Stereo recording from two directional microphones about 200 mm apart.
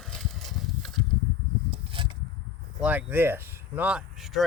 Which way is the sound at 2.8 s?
10° right (ahead or behind).